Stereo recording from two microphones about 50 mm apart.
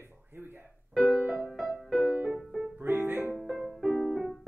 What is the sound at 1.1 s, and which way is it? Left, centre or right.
Music, centre.